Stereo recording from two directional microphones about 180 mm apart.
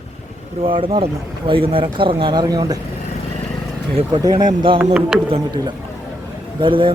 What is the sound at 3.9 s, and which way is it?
Speech, 25° right (ahead or behind).